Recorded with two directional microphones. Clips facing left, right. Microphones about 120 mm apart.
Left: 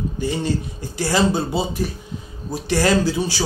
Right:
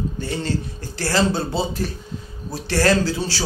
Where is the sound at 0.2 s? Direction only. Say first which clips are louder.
Left 5 dB; 15° left (ahead or behind).